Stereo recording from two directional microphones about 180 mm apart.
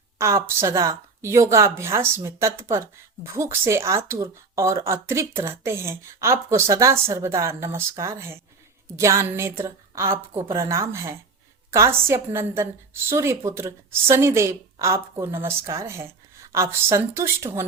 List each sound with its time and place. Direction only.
0.2 s a woman's voice: 15° right (ahead or behind)